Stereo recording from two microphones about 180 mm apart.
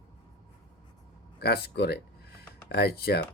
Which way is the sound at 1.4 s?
60° left (ahead or behind).